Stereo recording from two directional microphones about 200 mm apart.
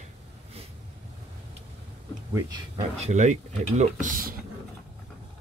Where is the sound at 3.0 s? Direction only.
35° right (ahead or behind).